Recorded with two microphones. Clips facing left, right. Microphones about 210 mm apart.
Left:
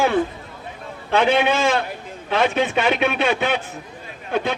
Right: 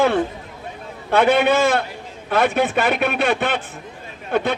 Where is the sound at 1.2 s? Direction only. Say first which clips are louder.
Right 3 dB; 50° right (ahead or behind).